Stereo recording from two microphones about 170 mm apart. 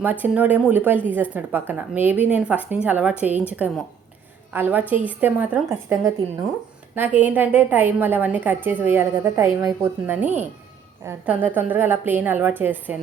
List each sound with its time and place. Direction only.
0.0 s a woman's voice: 10° right (ahead or behind)